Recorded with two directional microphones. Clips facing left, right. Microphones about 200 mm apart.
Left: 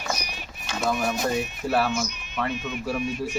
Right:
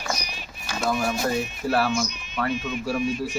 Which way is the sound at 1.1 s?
20° left (ahead or behind).